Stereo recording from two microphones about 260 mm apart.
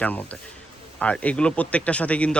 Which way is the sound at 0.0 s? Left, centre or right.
Centre.